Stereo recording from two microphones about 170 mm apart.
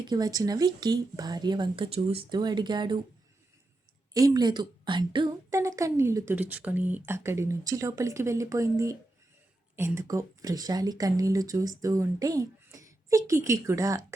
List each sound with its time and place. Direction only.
0.0 s speech: 25° right (ahead or behind)
4.1 s a woman's voice: 20° right (ahead or behind)